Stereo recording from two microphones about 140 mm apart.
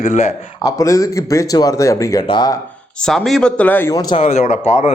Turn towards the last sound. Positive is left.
turn(degrees=50)  # may be behind; listen again after turning